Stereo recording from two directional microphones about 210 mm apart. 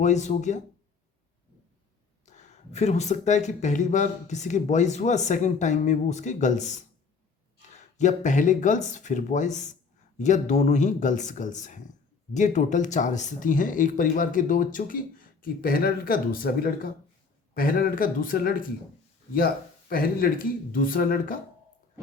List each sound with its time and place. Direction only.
0.0 s speech: 35° left (ahead or behind)
2.2 s speech: 35° left (ahead or behind)
19.9 s speech: 45° left (ahead or behind)